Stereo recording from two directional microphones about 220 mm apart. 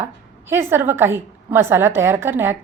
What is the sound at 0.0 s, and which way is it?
A woman's voice, 10° right (ahead or behind).